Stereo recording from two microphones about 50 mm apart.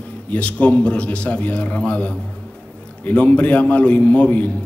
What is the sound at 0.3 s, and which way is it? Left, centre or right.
A man's voice, left.